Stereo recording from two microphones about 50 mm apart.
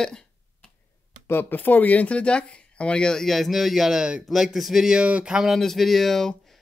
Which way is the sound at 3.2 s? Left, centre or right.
Centre.